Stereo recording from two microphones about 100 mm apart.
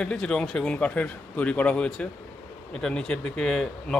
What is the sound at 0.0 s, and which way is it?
A man's voice, 10° left (ahead or behind).